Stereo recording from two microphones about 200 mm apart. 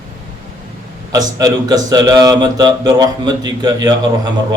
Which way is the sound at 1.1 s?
20° right (ahead or behind).